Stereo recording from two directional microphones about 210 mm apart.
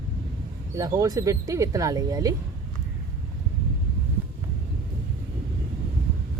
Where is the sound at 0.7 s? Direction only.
15° right (ahead or behind).